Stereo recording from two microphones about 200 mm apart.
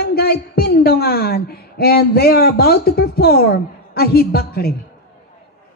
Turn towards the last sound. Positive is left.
turn(degrees=50)  # may be behind; listen again after turning